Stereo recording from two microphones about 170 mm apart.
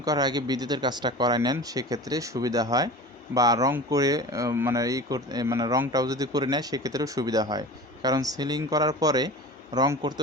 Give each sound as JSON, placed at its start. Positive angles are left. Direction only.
{"t": 0.0, "sound": "speech", "side_deg": -25}